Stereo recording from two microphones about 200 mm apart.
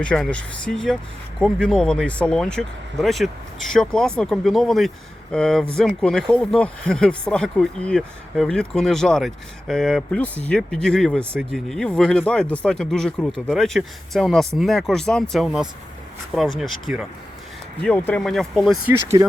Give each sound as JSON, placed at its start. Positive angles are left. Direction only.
{"t": 0.0, "sound": "speech", "side_deg": 5}
{"t": 19.1, "sound": "speech", "side_deg": -20}